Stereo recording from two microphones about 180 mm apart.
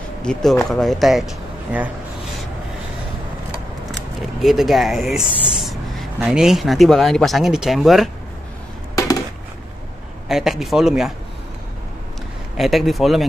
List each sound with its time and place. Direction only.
0.2 s speech: 5° left (ahead or behind)
4.4 s speech: centre (ahead or behind)
8.9 s a sound: 20° left (ahead or behind)
10.2 s speech: centre (ahead or behind)
12.5 s speech: centre (ahead or behind)